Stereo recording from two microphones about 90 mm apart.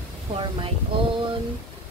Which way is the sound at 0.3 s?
70° right (ahead or behind).